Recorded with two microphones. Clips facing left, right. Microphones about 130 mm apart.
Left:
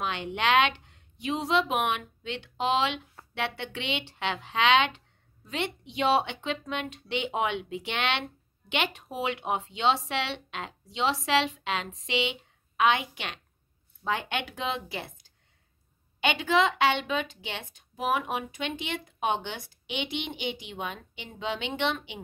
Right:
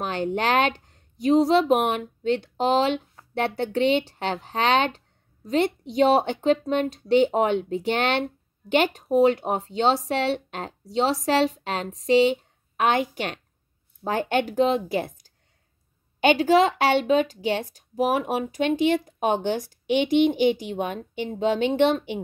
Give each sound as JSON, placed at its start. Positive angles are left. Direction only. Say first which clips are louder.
{"t": 0.0, "sound": "a woman's voice", "louder": "right 5 dB", "side_deg": -40}